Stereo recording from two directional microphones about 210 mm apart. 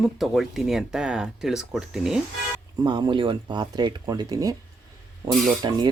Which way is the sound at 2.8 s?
20° right (ahead or behind).